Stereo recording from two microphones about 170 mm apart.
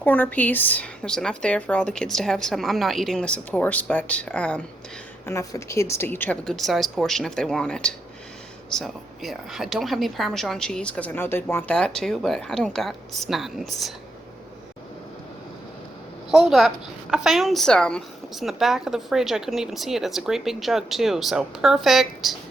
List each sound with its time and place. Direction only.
0.0 s speech: 10° left (ahead or behind)
5.2 s speech: 20° left (ahead or behind); by 13.9 s centre (ahead or behind)
16.3 s speech: centre (ahead or behind)